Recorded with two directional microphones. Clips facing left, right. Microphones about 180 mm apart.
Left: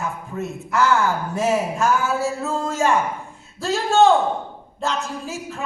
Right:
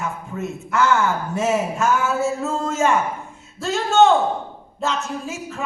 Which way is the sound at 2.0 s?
35° left (ahead or behind).